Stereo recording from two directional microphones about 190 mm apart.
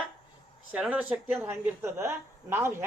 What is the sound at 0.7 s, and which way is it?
Speech, 5° right (ahead or behind).